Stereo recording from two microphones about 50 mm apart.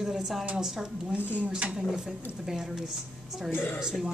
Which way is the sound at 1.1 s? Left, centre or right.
Right.